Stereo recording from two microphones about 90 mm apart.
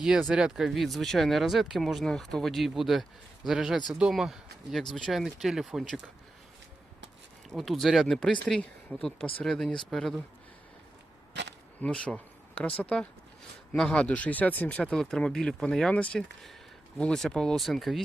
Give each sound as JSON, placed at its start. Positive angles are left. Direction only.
{"t": 0.0, "sound": "speech", "side_deg": -10}
{"t": 7.5, "sound": "speech", "side_deg": 0}
{"t": 11.8, "sound": "speech", "side_deg": 10}